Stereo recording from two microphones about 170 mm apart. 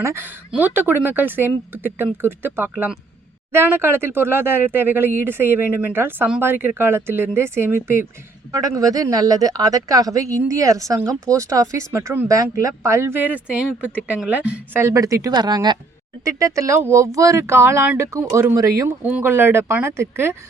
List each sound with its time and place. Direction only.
0.0 s speech: 15° right (ahead or behind)